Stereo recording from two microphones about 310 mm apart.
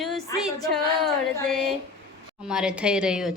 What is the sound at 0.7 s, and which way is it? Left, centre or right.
A woman's voice, centre.